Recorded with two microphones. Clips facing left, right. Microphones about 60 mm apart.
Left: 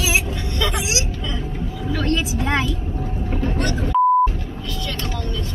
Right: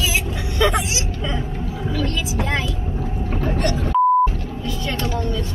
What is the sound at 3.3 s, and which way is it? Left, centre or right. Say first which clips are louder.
Boat: right 1 dB; centre.